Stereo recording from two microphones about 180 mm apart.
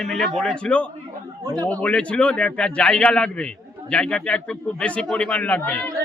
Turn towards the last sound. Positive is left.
turn(degrees=10)  # may be behind; listen again after turning